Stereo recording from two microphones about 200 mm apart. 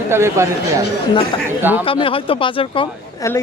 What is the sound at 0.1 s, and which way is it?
Speech, 15° right (ahead or behind).